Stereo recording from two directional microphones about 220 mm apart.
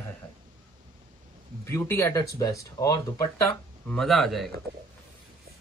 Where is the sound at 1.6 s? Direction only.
10° left (ahead or behind).